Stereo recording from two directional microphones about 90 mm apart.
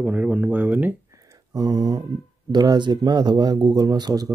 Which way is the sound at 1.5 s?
50° right (ahead or behind).